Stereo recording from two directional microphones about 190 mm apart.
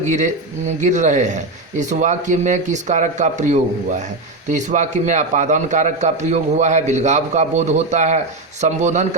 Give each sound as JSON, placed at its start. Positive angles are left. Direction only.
{"t": 0.0, "sound": "a man's voice", "side_deg": -40}